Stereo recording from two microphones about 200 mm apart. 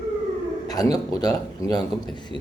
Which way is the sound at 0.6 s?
20° left (ahead or behind).